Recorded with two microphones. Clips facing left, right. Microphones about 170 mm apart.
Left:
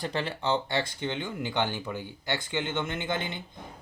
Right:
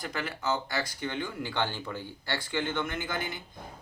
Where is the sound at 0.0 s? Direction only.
30° left (ahead or behind).